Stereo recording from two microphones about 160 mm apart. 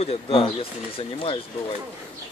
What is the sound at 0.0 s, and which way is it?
Speech, 40° left (ahead or behind).